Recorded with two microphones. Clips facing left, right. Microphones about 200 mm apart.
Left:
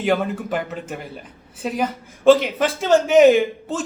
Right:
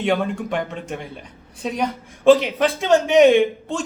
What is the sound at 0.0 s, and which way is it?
A man's voice, 5° left (ahead or behind).